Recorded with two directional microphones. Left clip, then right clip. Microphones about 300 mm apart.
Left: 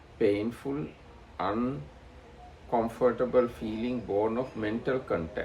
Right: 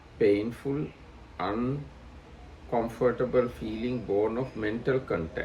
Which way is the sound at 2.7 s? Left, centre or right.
Centre.